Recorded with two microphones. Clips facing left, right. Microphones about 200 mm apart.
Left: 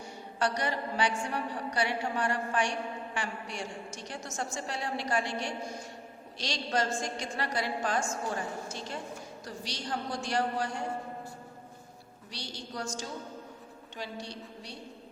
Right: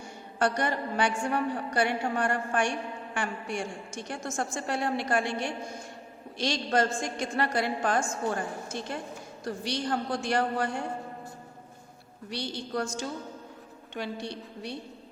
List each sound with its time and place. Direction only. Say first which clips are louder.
0.3 s a woman's voice: right 4 dB; 50° right (ahead or behind)
12.3 s a woman's voice: right 8 dB; 55° right (ahead or behind)